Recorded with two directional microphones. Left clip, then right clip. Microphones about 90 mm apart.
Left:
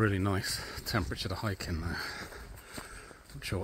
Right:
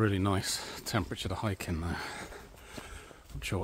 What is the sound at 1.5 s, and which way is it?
Speech, 65° right (ahead or behind).